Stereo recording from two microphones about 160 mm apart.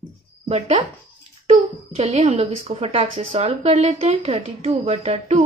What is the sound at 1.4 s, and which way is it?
A woman's voice, 45° right (ahead or behind).